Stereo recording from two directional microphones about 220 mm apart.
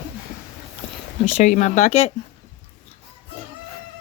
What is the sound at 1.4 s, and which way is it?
Speech, 35° left (ahead or behind).